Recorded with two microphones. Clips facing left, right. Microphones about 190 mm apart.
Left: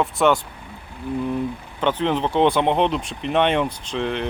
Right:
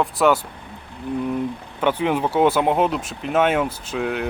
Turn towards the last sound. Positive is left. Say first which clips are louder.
# even
turn(degrees=-5)  # may be behind; listen again after turning